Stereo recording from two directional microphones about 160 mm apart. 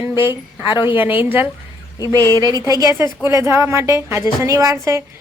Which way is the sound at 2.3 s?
25° right (ahead or behind).